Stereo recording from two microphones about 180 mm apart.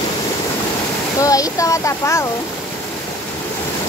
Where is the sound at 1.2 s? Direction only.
20° left (ahead or behind).